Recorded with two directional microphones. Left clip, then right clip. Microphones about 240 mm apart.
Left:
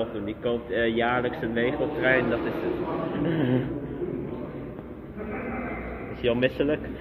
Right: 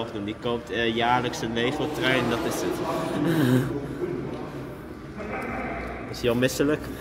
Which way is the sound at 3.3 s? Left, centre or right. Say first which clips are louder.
Right 3 dB; right.